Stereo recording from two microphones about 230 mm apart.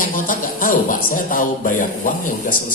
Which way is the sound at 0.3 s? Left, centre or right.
Left.